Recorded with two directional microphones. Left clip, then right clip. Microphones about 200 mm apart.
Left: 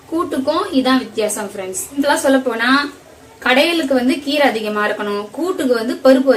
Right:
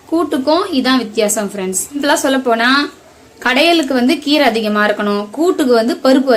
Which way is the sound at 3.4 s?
60° right (ahead or behind).